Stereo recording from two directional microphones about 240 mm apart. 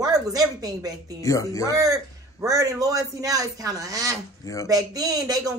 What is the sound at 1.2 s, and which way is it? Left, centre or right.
Speech, centre.